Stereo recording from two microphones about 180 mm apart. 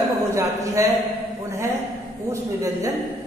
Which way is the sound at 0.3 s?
15° right (ahead or behind).